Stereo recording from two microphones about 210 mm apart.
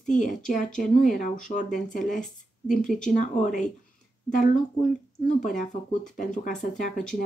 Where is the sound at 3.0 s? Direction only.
35° left (ahead or behind).